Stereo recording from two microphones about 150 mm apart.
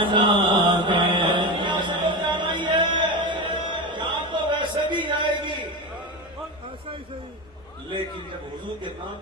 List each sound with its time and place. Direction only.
0.0 s mantra: 35° right (ahead or behind)